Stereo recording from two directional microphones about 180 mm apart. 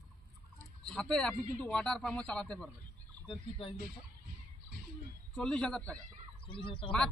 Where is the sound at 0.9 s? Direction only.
5° left (ahead or behind).